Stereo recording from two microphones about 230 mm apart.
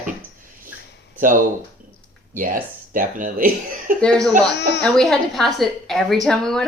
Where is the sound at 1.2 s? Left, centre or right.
Right.